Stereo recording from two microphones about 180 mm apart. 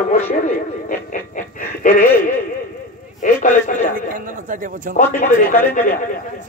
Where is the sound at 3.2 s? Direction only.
45° left (ahead or behind).